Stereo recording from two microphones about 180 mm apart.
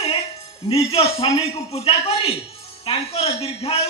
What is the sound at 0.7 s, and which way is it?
A man's voice, 35° left (ahead or behind).